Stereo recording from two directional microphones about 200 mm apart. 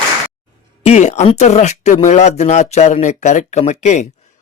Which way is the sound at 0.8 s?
35° left (ahead or behind).